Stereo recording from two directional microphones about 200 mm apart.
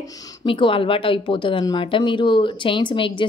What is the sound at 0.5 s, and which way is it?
Speech, 25° left (ahead or behind).